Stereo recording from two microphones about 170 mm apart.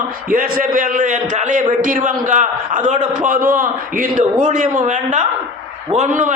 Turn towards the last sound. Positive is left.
turn(degrees=-50)  # may be behind; listen again after turning